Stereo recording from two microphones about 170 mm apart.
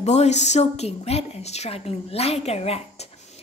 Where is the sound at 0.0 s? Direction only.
40° left (ahead or behind).